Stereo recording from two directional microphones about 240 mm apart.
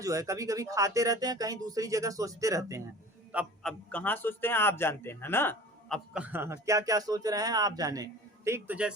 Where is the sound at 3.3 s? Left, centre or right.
Centre.